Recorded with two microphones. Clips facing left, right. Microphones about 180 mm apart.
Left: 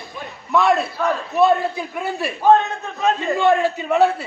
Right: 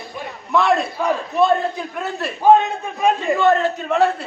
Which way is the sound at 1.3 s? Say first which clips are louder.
Left 2 dB; 5° left (ahead or behind).